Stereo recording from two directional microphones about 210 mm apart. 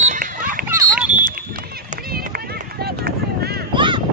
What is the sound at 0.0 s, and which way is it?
Run, 35° right (ahead or behind).